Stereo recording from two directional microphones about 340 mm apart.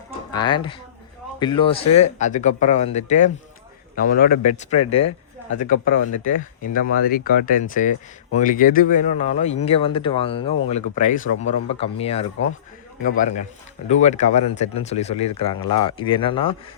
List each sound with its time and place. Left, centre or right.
0.3 s speech: centre